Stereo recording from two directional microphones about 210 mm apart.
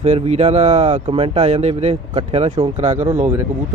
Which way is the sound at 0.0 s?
30° right (ahead or behind).